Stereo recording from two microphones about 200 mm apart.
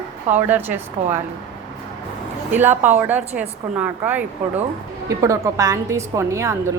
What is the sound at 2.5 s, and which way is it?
A woman's voice, 10° right (ahead or behind).